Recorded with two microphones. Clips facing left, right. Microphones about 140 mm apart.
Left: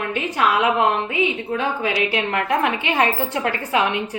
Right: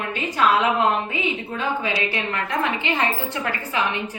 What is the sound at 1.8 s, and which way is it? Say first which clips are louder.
A woman's voice: left 4 dB; 70° left (ahead or behind).